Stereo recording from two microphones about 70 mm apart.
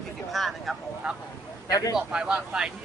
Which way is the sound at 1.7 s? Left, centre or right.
Left.